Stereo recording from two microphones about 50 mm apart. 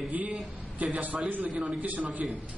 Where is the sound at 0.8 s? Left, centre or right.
Right.